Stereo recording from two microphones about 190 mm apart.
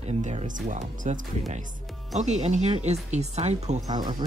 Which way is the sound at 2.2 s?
35° right (ahead or behind).